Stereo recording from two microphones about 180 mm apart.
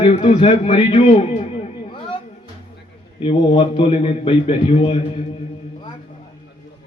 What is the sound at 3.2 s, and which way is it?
A man's voice, 30° left (ahead or behind).